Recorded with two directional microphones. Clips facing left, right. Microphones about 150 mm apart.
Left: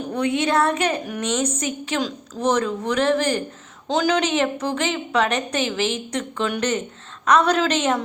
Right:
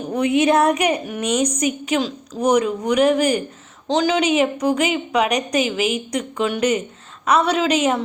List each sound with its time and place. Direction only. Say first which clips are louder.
0.1 s a woman's voice: right 5 dB; 20° right (ahead or behind)
3.8 s a woman's voice: right 2 dB; centre (ahead or behind)